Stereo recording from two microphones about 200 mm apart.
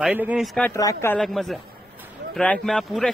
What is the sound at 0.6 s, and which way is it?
Speech, 15° left (ahead or behind).